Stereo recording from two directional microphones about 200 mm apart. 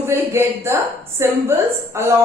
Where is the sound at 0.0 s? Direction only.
10° right (ahead or behind).